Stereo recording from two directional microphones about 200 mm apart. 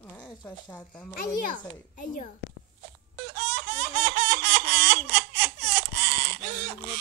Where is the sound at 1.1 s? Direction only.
40° left (ahead or behind).